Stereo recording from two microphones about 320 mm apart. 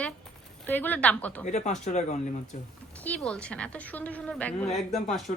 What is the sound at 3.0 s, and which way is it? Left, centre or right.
A woman's voice, centre.